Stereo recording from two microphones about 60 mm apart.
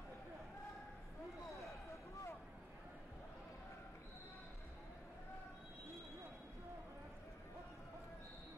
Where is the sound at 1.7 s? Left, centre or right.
Left.